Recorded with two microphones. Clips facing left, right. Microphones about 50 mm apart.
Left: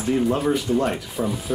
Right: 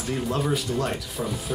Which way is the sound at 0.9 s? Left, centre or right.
Centre.